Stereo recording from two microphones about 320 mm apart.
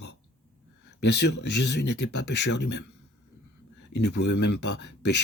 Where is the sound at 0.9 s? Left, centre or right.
Left.